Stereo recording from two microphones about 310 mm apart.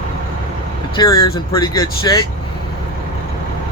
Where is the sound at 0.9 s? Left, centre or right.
Centre.